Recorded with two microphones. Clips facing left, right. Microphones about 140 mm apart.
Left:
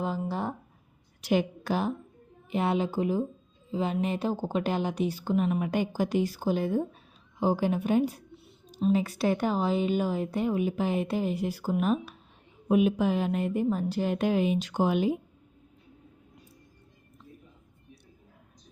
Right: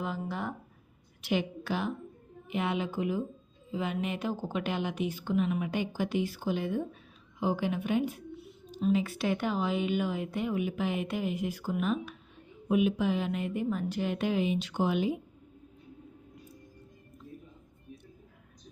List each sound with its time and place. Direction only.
0.0 s a woman's voice: 30° left (ahead or behind)